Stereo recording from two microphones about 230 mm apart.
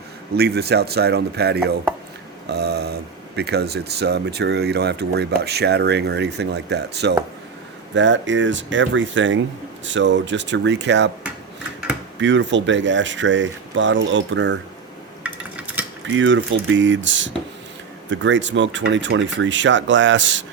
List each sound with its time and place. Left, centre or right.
0.3 s speech: right
12.2 s speech: right
15.2 s dishes: centre
16.0 s speech: right